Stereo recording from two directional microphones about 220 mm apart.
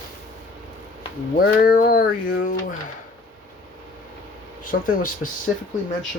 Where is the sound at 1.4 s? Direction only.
40° left (ahead or behind).